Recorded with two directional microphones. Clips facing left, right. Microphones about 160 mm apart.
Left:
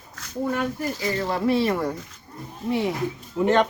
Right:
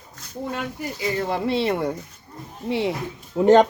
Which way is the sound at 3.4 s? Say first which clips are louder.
Right 6 dB; 40° right (ahead or behind).